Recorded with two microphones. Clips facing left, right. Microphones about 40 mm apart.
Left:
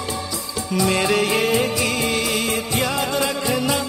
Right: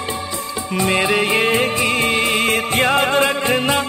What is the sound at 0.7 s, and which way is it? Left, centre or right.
Music, right.